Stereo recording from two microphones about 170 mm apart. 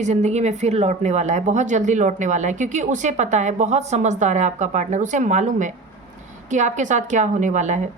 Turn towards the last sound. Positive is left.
turn(degrees=-45)  # may be behind; listen again after turning